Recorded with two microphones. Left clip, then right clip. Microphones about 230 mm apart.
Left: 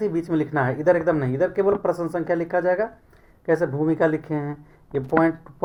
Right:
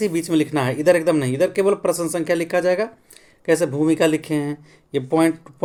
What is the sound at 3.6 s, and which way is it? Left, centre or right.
Speech, right.